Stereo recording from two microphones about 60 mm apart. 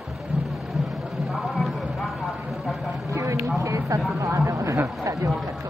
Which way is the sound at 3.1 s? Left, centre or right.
Right.